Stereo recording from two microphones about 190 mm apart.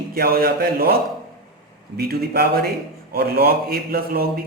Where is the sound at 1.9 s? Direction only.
55° right (ahead or behind).